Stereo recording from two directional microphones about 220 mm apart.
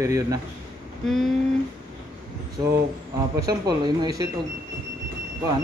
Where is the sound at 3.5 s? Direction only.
15° right (ahead or behind).